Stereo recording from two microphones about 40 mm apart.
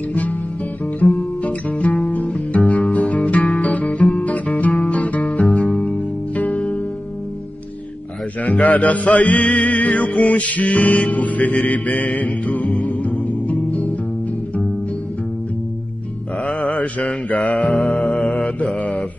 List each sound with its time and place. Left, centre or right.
0.1 s guitar: left
1.4 s music: left
8.5 s music: left
16.4 s mantra: left